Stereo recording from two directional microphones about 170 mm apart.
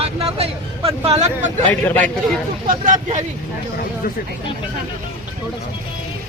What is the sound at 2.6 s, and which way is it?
Speech, 50° right (ahead or behind).